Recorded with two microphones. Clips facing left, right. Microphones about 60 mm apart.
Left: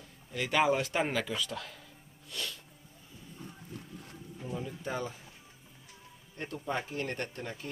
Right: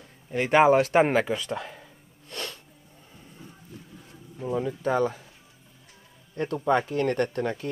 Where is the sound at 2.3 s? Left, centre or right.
Right.